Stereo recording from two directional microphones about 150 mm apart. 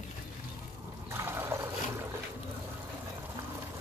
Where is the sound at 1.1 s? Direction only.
15° right (ahead or behind).